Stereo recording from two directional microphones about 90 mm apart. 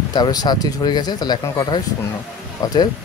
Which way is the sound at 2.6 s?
45° left (ahead or behind).